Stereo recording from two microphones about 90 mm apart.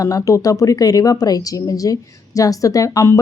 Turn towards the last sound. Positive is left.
turn(degrees=40)  # may be behind; listen again after turning